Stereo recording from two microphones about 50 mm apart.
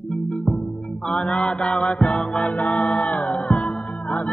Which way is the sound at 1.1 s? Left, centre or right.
Left.